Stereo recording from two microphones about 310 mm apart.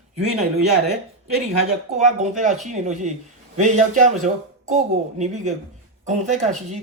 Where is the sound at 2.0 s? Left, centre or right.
Right.